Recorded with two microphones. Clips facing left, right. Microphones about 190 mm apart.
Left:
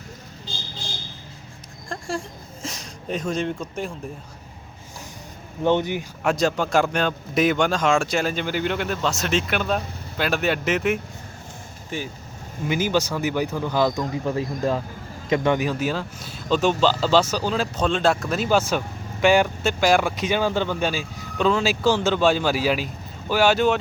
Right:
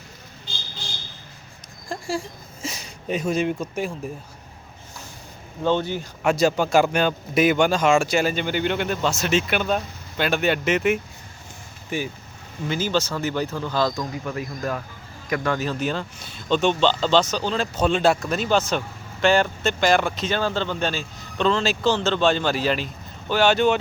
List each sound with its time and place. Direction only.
1.9 s a sound: centre (ahead or behind)
5.6 s speech: 15° left (ahead or behind)
6.2 s a man's voice: 5° right (ahead or behind)
12.6 s a man's voice: 15° left (ahead or behind)